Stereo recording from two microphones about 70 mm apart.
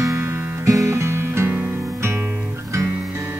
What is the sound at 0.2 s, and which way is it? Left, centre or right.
Music, right.